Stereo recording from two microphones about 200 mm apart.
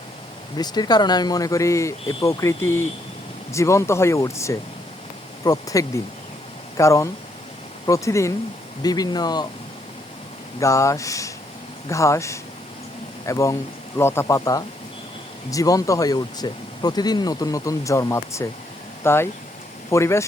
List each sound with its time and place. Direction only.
0.5 s speech: 20° left (ahead or behind)
10.6 s speech: 15° left (ahead or behind)